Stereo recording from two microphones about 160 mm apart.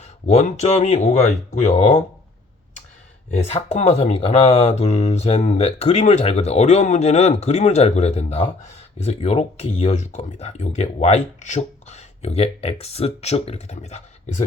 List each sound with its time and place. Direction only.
0.0 s speech: 45° left (ahead or behind)
3.3 s speech: 45° left (ahead or behind)